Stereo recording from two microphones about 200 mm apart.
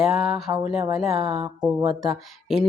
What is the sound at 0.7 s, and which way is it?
Speech, centre (ahead or behind).